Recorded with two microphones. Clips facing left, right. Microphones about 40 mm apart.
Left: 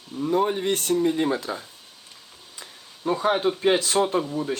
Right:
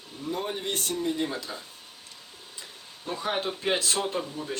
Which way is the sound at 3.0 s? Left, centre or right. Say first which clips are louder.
Left 9 dB; left.